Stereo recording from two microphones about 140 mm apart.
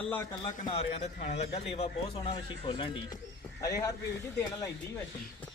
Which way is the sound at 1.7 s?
40° left (ahead or behind).